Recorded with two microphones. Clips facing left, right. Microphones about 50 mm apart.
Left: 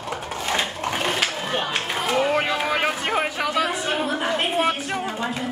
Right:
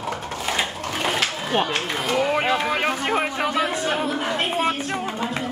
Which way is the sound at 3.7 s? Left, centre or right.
Centre.